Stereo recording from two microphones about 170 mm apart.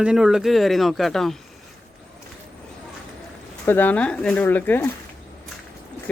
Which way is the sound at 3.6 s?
10° left (ahead or behind).